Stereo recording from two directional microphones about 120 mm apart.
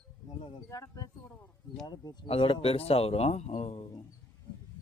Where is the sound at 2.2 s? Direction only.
50° left (ahead or behind).